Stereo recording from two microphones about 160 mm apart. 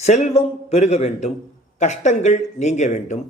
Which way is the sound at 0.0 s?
45° left (ahead or behind).